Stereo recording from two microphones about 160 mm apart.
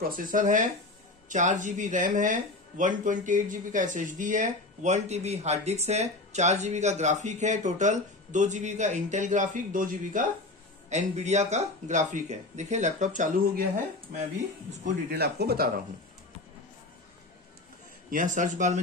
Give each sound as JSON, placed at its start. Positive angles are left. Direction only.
{"t": 0.0, "sound": "speech", "side_deg": -60}
{"t": 15.0, "sound": "speech", "side_deg": -90}
{"t": 18.1, "sound": "speech", "side_deg": -50}